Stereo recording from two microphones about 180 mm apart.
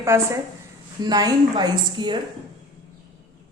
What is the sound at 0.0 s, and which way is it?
A woman's voice, 15° right (ahead or behind).